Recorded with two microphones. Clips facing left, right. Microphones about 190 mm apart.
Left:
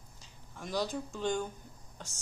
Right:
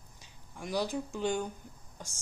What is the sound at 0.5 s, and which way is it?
Speech, 10° right (ahead or behind).